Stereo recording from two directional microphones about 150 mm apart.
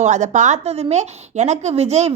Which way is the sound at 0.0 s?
55° right (ahead or behind).